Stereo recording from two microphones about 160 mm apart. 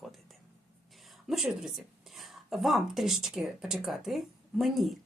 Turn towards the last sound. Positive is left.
turn(degrees=0)  # may be behind; listen again after turning